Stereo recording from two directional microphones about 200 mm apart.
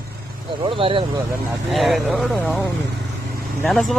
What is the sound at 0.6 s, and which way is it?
Speech, 25° right (ahead or behind).